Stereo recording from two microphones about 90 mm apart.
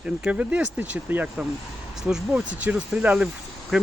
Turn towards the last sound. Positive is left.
turn(degrees=-5)  # may be behind; listen again after turning